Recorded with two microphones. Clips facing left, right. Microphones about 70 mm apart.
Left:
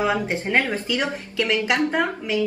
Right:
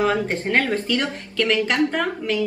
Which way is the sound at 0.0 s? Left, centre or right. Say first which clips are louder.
Right 2 dB; centre.